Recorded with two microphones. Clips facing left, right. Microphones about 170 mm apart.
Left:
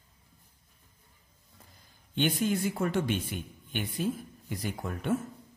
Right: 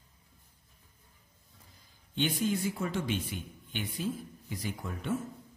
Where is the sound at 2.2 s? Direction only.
60° left (ahead or behind).